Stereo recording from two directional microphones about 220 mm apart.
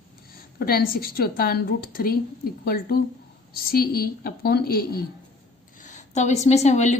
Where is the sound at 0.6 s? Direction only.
45° left (ahead or behind).